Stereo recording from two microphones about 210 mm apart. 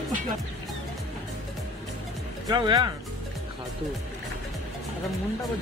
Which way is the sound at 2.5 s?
20° right (ahead or behind).